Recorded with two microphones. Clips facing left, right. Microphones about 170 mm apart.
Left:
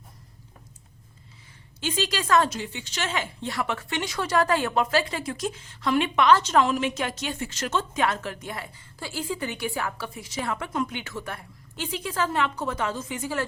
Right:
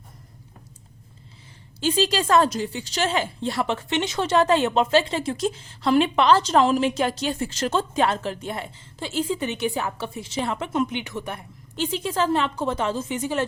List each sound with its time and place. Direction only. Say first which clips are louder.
1.8 s a woman's voice: right 6 dB; 30° right (ahead or behind)